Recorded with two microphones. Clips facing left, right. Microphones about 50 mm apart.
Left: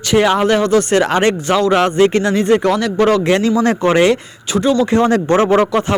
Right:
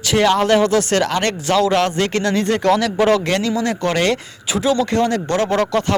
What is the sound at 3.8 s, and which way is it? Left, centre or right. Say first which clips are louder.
Speech: left 6 dB; centre.